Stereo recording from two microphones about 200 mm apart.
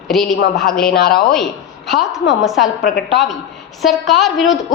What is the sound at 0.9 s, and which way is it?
Speech, 50° left (ahead or behind).